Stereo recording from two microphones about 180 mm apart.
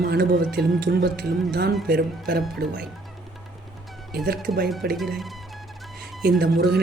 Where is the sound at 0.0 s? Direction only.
65° right (ahead or behind).